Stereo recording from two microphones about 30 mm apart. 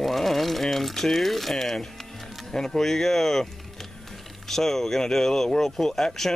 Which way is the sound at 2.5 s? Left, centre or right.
Centre.